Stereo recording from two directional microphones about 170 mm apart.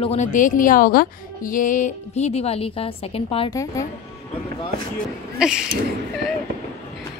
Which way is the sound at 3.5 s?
20° left (ahead or behind).